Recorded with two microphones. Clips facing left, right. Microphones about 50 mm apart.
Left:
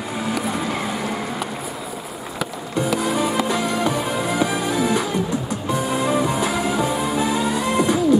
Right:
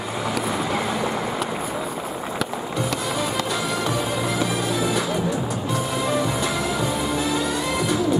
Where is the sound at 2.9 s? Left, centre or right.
Centre.